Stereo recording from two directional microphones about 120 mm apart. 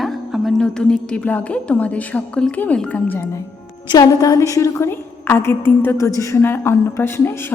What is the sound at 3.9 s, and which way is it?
A woman's voice, 30° left (ahead or behind).